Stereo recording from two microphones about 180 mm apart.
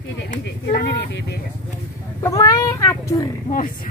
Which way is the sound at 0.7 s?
60° left (ahead or behind).